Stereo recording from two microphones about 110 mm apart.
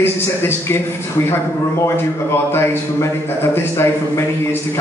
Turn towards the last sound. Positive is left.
turn(degrees=20)  # may be behind; listen again after turning